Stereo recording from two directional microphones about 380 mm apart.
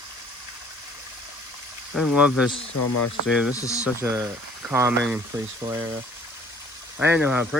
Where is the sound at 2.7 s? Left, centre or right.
Left.